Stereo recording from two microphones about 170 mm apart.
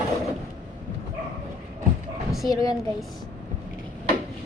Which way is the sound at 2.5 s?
20° left (ahead or behind).